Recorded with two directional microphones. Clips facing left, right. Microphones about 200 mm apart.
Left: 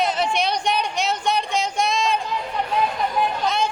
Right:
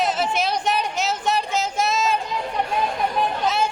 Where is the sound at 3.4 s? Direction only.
5° right (ahead or behind).